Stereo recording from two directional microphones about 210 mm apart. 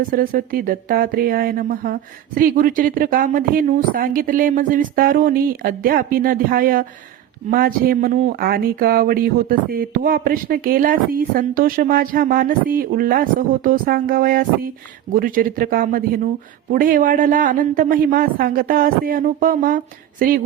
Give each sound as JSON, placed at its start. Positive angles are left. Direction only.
{"t": 0.1, "sound": "speech", "side_deg": -40}